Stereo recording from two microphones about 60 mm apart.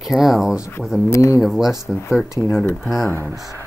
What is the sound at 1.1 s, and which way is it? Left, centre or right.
Speech, left.